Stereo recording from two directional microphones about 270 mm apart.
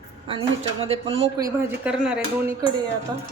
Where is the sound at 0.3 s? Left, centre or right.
Right.